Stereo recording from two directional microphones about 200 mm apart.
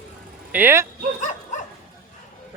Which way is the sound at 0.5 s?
10° right (ahead or behind).